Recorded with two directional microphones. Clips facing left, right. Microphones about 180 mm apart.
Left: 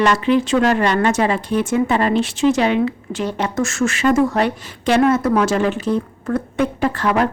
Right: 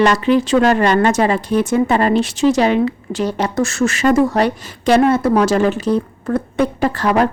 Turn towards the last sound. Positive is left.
turn(degrees=-40)  # may be behind; listen again after turning